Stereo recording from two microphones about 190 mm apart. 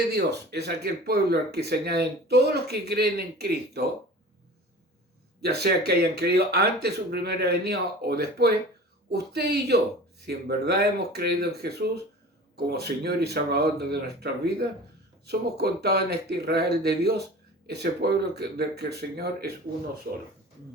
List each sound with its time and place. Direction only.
0.1 s speech: 60° right (ahead or behind)
5.4 s speech: 55° right (ahead or behind)